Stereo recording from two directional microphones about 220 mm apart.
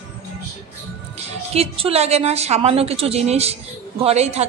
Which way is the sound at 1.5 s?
25° right (ahead or behind).